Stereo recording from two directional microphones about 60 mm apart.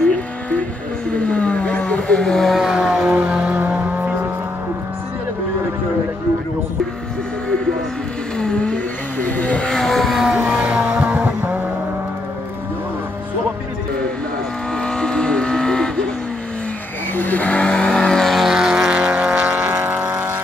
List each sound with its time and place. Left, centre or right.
1.1 s vehicle: centre
3.2 s vehicle: centre
8.4 s vehicle: centre
9.6 s vehicle: centre
10.4 s vehicle: right
11.1 s vehicle: right
14.7 s vehicle: centre
17.1 s vehicle: left; by 18.3 s centre
18.3 s vehicle: centre
19.4 s vehicle: right